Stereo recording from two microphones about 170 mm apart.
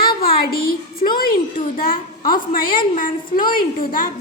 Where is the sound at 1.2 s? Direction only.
60° left (ahead or behind).